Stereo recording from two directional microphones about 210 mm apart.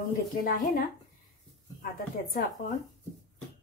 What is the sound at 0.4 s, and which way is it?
Speech, 45° left (ahead or behind).